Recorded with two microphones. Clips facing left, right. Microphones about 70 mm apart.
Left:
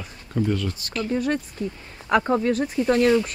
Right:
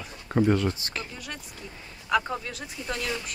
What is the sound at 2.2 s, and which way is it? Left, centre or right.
Speech, left.